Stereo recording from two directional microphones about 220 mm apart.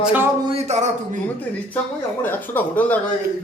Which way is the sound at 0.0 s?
5° right (ahead or behind).